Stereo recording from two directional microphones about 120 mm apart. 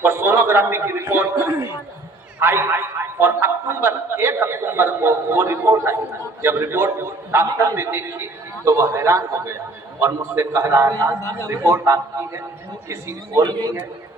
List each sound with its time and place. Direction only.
0.0 s a man's voice: 20° right (ahead or behind)